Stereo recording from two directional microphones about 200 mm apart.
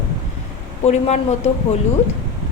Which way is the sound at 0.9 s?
35° left (ahead or behind).